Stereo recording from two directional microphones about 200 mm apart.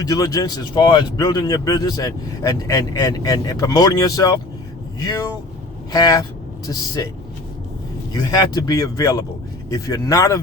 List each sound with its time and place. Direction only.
0.0 s speech: 20° left (ahead or behind)
8.1 s speech: 20° left (ahead or behind)